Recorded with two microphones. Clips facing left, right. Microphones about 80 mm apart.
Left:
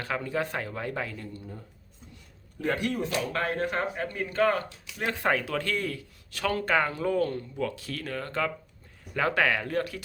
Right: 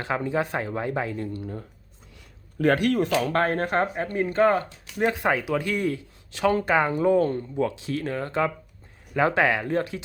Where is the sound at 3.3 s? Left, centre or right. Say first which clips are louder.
Right 6 dB; right.